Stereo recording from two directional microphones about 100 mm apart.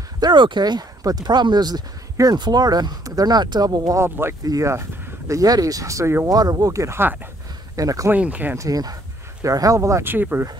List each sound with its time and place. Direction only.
0.2 s speech: 50° right (ahead or behind)
4.0 s speech: 25° right (ahead or behind)
6.2 s speech: 40° right (ahead or behind); by 7.2 s 25° right (ahead or behind)
7.7 s speech: 35° right (ahead or behind)
8.1 s speech: 15° right (ahead or behind)
8.5 s speech: 40° right (ahead or behind); by 10.4 s 20° right (ahead or behind)